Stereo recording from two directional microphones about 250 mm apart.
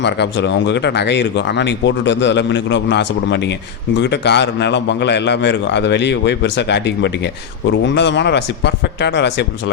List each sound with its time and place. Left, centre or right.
0.0 s speech: left